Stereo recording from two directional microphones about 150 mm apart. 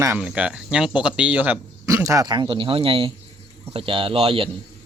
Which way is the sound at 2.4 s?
35° right (ahead or behind).